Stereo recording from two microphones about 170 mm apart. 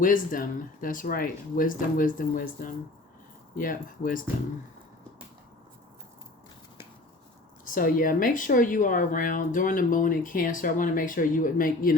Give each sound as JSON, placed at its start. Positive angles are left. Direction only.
{"t": 0.0, "sound": "speech", "side_deg": 55}
{"t": 7.6, "sound": "speech", "side_deg": 55}